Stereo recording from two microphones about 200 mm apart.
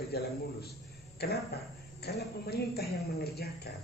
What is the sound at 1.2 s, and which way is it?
A man's voice, 55° left (ahead or behind).